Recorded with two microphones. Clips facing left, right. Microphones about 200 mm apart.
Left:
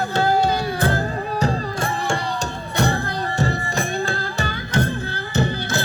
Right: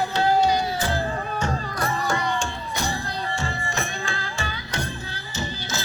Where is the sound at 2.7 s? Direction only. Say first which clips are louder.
Left 9 dB; 60° left (ahead or behind).